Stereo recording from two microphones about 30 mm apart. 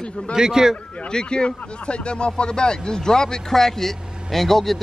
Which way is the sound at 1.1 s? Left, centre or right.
Left.